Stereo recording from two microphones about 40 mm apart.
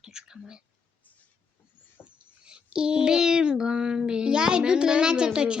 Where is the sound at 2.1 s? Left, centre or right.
Right.